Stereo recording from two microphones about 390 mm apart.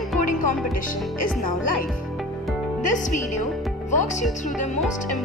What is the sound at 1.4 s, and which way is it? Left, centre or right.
Speech, left.